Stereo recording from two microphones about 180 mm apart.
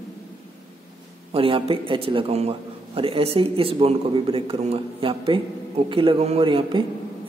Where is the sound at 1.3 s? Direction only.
30° right (ahead or behind).